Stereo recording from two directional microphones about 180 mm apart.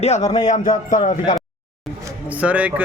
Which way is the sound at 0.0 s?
40° left (ahead or behind).